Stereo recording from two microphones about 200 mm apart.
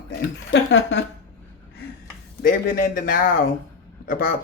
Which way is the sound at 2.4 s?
45° left (ahead or behind).